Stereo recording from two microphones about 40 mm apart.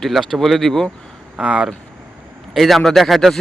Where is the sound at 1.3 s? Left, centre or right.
Right.